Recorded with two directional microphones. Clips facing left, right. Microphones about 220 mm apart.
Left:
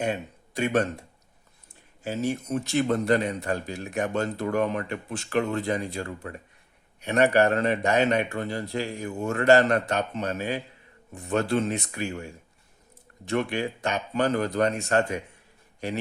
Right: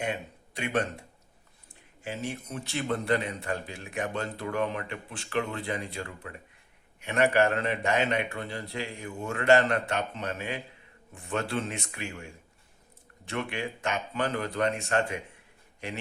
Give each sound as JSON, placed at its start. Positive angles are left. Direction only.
{"t": 0.0, "sound": "speech", "side_deg": 40}
{"t": 2.0, "sound": "speech", "side_deg": 40}